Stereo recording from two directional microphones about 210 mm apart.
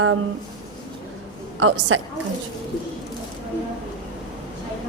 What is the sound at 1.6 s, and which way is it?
Speech, 75° right (ahead or behind).